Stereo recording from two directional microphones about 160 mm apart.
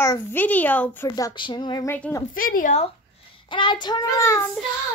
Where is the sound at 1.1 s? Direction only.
25° left (ahead or behind).